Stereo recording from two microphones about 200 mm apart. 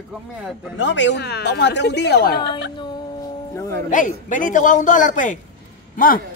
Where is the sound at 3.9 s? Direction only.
40° left (ahead or behind).